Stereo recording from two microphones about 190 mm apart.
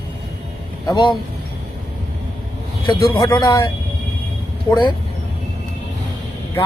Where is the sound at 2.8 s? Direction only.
25° left (ahead or behind).